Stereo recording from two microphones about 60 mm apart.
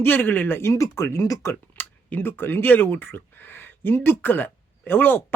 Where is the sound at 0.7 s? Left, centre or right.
Left.